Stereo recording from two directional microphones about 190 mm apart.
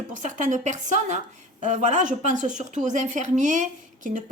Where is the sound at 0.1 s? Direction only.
40° right (ahead or behind).